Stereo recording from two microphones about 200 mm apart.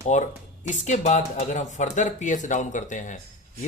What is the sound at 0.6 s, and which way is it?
Speech, 35° left (ahead or behind).